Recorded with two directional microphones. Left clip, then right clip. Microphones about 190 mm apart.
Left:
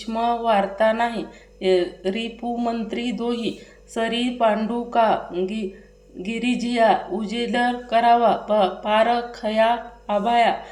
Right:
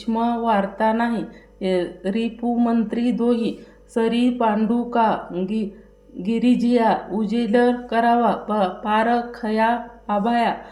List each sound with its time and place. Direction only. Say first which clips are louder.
0.0 s speech: even; 30° right (ahead or behind)